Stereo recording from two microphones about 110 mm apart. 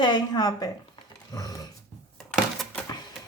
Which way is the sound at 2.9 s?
40° left (ahead or behind).